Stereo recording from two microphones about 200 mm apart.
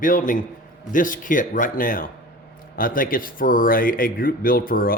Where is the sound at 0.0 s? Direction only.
45° left (ahead or behind).